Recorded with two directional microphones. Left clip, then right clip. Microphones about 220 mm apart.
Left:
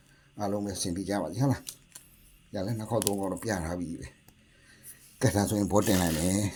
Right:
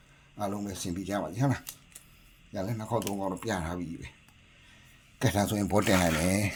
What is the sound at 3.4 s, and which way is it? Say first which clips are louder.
Speech: left 1 dB; 5° right (ahead or behind).